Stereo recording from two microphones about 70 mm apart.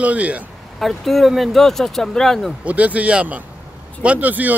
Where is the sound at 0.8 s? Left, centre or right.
Centre.